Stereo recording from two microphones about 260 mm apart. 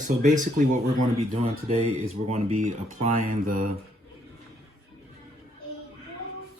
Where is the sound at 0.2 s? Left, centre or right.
Right.